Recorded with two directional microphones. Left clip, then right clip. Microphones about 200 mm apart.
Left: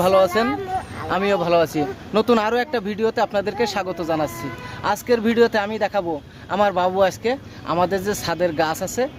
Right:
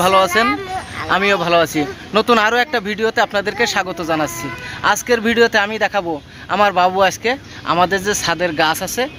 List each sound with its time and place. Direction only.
0.0 s speech: centre (ahead or behind)
0.4 s speech: 15° left (ahead or behind)
1.1 s speech: centre (ahead or behind)